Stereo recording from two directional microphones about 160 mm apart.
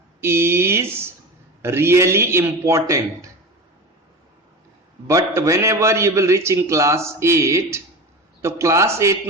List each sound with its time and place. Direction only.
0.2 s a man's voice: 15° right (ahead or behind)
5.0 s a man's voice: 20° right (ahead or behind)